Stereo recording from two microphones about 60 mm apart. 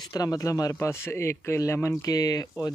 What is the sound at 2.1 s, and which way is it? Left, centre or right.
Speech, left.